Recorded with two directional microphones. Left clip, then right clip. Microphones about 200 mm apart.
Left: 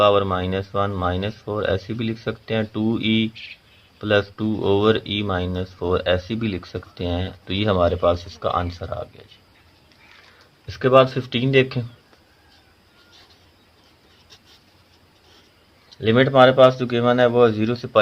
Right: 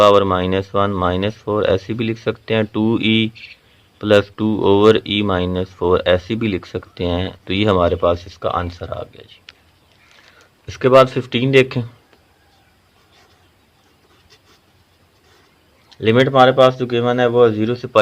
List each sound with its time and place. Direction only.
0.0 s speech: 40° right (ahead or behind)
10.7 s speech: 35° right (ahead or behind)
16.1 s speech: 15° right (ahead or behind)